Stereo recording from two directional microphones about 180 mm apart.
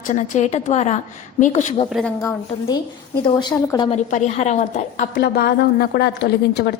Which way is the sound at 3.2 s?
25° left (ahead or behind).